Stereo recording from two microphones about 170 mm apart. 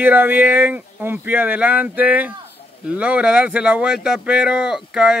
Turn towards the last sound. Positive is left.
turn(degrees=-5)  # may be behind; listen again after turning